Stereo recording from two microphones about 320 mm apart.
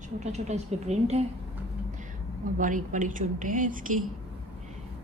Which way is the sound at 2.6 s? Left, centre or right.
Right.